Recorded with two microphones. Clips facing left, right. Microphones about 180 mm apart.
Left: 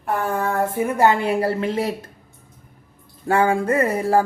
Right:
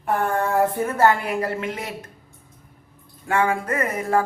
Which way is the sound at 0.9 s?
15° left (ahead or behind).